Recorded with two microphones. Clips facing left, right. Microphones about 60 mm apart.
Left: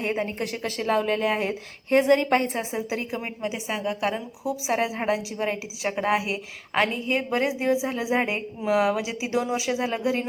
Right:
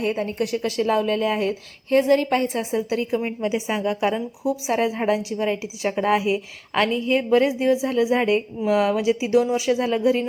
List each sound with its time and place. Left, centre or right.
0.0 s a woman's voice: left
0.6 s a woman's voice: centre
1.9 s a woman's voice: left
2.6 s a woman's voice: left
3.2 s a woman's voice: centre
4.7 s a woman's voice: centre